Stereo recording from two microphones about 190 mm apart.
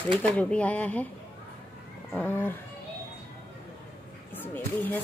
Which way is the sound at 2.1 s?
10° left (ahead or behind).